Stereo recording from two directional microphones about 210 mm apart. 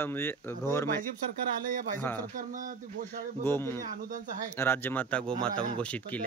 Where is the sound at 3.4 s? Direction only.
10° left (ahead or behind).